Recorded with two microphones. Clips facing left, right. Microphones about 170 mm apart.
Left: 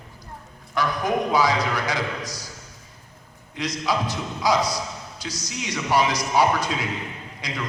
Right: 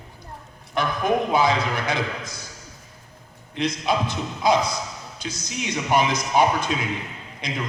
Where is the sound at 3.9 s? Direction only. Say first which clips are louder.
Right 1 dB; 25° right (ahead or behind).